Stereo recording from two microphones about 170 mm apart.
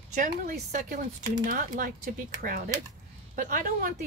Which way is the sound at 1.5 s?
55° right (ahead or behind).